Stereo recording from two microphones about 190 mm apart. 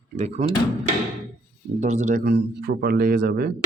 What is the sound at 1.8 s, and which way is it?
Speech, 35° right (ahead or behind).